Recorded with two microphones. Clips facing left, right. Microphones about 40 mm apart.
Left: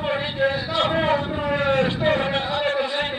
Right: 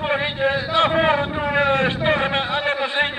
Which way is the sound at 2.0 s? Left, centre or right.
Right.